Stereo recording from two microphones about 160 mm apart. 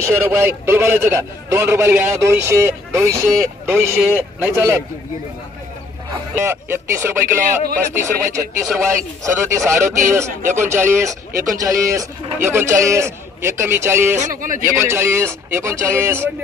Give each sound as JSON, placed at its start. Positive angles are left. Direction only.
{"t": 0.0, "sound": "a man's voice", "side_deg": -15}
{"t": 6.4, "sound": "a man's voice", "side_deg": -15}
{"t": 14.1, "sound": "speech", "side_deg": -55}
{"t": 14.6, "sound": "a man's voice", "side_deg": -15}